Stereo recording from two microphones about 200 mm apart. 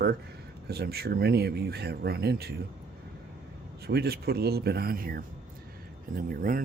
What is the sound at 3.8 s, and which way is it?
Speech, 55° right (ahead or behind).